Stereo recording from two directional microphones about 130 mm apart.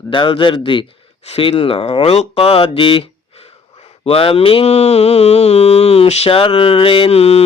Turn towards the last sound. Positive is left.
turn(degrees=50)  # may be behind; listen again after turning